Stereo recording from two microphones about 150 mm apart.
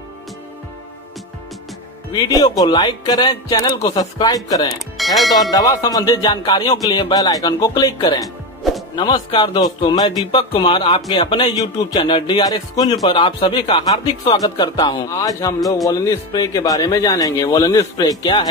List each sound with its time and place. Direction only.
2.2 s music: 25° left (ahead or behind)
4.7 s speech: centre (ahead or behind)
5.5 s music: 25° left (ahead or behind)
8.9 s speech: 30° left (ahead or behind)
15.0 s music: 20° left (ahead or behind)